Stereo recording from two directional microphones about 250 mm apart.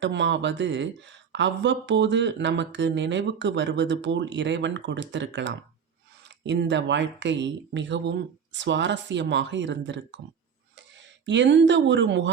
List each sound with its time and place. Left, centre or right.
0.0 s speech: right
11.3 s speech: right